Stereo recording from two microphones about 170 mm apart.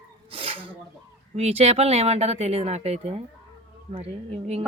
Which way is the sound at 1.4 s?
40° right (ahead or behind).